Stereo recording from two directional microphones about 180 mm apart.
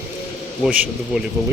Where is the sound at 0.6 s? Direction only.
5° right (ahead or behind).